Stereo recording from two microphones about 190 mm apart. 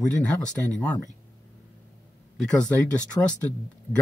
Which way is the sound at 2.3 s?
5° left (ahead or behind).